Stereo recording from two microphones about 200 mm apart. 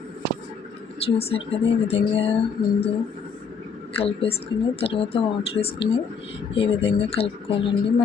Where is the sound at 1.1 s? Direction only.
30° left (ahead or behind).